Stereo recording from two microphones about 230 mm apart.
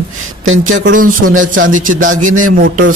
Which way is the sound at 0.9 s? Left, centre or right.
Right.